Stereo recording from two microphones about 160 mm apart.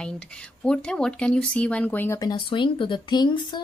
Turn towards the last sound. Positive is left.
turn(degrees=30)  # may be behind; listen again after turning